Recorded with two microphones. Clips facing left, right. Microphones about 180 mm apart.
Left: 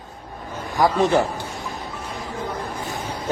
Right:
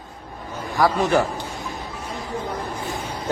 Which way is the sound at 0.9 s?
20° left (ahead or behind).